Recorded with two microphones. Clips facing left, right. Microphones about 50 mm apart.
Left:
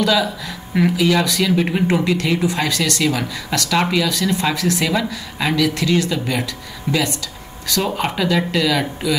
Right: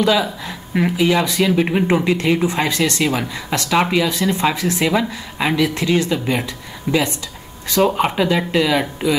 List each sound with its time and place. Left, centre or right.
0.0 s speech: right
1.5 s speech: centre